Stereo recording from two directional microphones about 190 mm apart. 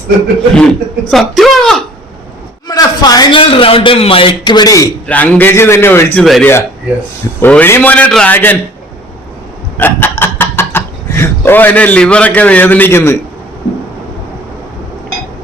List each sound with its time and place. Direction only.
0.5 s speech: centre (ahead or behind)
2.6 s a man's voice: 20° left (ahead or behind)
5.0 s a man's voice: 10° left (ahead or behind)
6.2 s a man's voice: centre (ahead or behind)
9.7 s speech: 10° left (ahead or behind)